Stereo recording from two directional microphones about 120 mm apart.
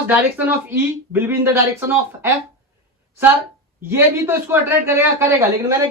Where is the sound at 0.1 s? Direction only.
15° right (ahead or behind).